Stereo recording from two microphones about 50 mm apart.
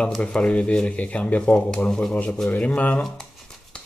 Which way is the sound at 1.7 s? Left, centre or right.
Centre.